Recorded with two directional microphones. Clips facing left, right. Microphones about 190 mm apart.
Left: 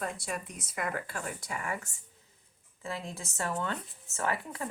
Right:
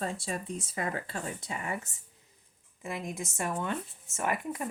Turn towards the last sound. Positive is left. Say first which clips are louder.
# right 1 dB
turn(degrees=-15)  # may be behind; listen again after turning